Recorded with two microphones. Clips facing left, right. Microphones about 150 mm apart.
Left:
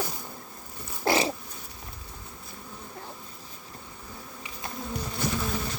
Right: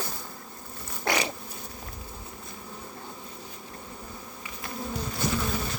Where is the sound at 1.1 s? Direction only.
30° left (ahead or behind).